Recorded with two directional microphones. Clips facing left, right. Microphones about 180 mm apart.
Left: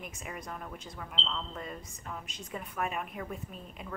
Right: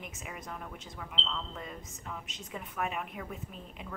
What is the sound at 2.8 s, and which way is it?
Speech, 5° right (ahead or behind).